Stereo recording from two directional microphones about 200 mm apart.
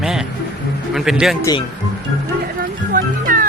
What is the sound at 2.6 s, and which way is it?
Music, 45° right (ahead or behind).